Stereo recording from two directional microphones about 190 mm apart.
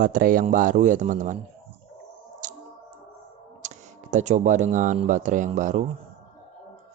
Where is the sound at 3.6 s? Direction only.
40° right (ahead or behind).